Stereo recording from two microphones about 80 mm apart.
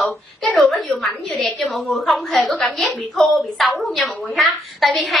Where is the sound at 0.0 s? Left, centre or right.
Centre.